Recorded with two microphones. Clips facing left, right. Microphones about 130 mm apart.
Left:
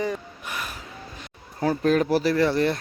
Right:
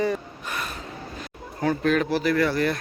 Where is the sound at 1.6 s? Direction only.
35° left (ahead or behind).